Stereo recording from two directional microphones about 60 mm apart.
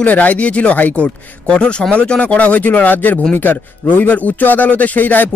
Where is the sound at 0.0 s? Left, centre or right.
Left.